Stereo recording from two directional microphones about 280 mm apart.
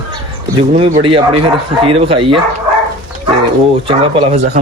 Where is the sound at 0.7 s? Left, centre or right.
Right.